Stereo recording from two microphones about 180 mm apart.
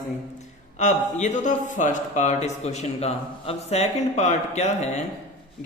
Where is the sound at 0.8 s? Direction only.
40° left (ahead or behind).